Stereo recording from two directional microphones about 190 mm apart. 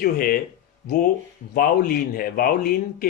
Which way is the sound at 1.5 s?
50° left (ahead or behind).